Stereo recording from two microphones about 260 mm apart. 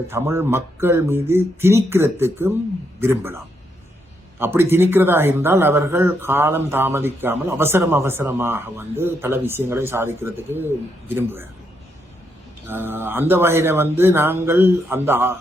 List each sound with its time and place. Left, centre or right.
0.1 s speech: centre
12.6 s speech: centre